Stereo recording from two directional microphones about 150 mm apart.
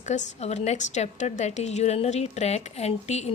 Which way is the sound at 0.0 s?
50° left (ahead or behind).